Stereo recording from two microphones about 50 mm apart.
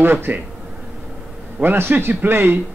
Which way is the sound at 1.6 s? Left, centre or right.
Right.